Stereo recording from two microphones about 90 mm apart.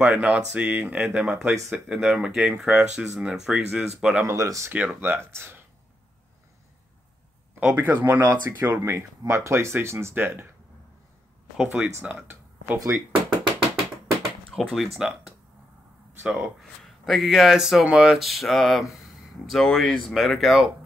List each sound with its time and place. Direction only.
0.0 s speech: 10° right (ahead or behind)
4.2 s speech: 35° right (ahead or behind)
4.7 s speech: 20° right (ahead or behind)
7.7 s speech: 20° right (ahead or behind)
11.5 s speech: 15° right (ahead or behind)
12.7 s speech: 35° right (ahead or behind)
14.5 s speech: centre (ahead or behind)